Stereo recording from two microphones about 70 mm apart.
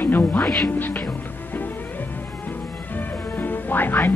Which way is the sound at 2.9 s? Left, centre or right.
Left.